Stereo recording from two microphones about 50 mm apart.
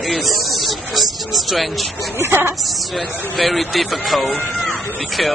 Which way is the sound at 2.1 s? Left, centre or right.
Right.